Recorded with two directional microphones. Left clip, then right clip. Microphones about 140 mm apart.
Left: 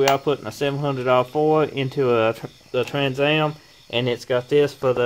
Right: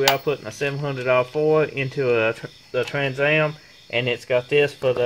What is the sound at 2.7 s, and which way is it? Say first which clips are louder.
Speech: left 1 dB; 10° right (ahead or behind).